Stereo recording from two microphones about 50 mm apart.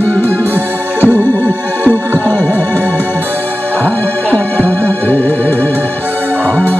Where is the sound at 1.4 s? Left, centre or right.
Right.